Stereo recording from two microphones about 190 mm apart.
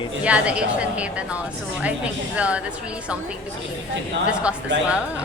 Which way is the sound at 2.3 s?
5° right (ahead or behind).